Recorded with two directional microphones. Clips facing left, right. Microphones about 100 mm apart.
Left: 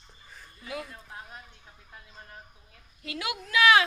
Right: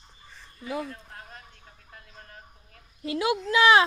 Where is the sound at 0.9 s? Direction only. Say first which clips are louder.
Right 1 dB; 15° left (ahead or behind).